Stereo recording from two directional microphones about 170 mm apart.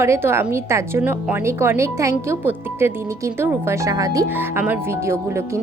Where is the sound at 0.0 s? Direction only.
15° right (ahead or behind).